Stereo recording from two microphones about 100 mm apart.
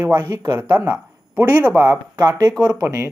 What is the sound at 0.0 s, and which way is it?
Speech, 20° right (ahead or behind).